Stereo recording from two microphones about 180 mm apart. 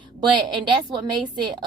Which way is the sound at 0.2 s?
25° right (ahead or behind).